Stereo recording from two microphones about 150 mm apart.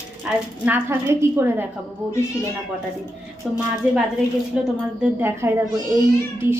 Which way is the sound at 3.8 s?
10° right (ahead or behind).